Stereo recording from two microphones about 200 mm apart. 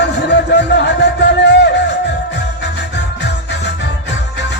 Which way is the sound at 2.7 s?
60° left (ahead or behind).